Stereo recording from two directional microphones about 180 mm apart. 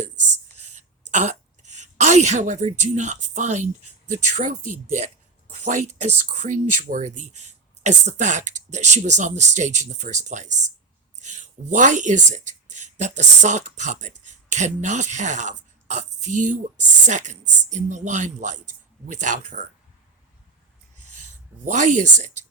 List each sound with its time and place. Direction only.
0.0 s a sound: 40° right (ahead or behind)
4.9 s speech: 40° right (ahead or behind)
21.7 s speech: 45° right (ahead or behind)